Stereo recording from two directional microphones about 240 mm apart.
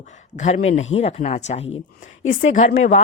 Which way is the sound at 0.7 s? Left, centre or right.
Left.